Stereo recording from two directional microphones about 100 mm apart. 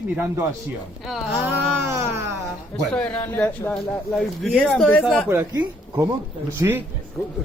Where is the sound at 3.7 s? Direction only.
5° left (ahead or behind).